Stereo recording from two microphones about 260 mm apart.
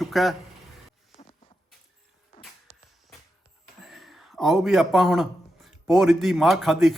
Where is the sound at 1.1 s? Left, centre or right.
Left.